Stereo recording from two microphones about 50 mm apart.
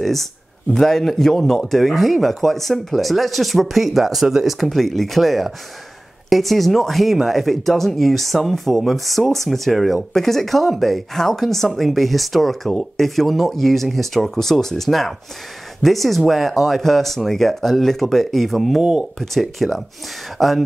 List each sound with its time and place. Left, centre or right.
0.0 s a man's voice: centre
18.8 s speech: centre
19.1 s speech: centre